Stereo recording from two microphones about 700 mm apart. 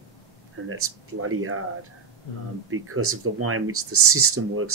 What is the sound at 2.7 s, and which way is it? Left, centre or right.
Speech, centre.